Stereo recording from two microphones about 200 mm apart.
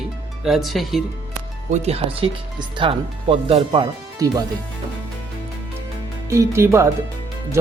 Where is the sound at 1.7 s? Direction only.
30° right (ahead or behind).